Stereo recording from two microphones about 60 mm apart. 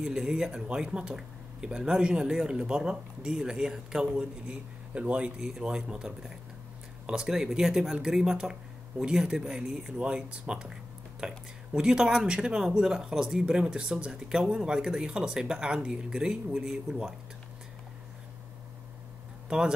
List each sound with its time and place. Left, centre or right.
0.0 s speech: centre
19.5 s speech: centre